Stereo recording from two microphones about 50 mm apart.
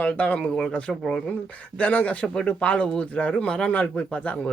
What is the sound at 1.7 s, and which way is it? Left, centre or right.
Speech, left.